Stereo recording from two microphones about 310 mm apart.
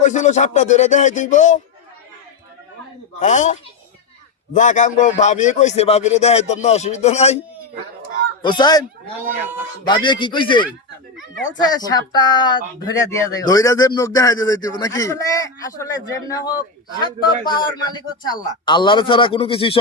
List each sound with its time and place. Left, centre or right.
0.0 s speech: left
3.2 s speech: left
8.4 s a man's voice: centre
9.8 s a man's voice: centre